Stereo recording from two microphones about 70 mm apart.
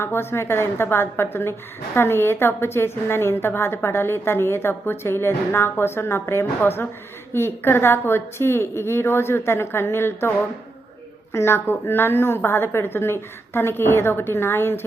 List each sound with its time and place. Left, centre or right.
0.0 s a woman's voice: left